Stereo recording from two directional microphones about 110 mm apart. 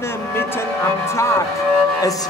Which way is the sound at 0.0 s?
20° left (ahead or behind).